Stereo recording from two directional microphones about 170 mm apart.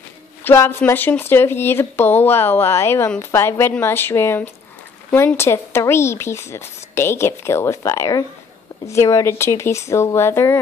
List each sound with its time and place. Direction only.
0.4 s a woman's voice: 15° left (ahead or behind)